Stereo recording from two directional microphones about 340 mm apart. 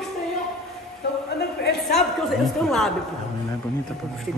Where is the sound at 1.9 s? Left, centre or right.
Centre.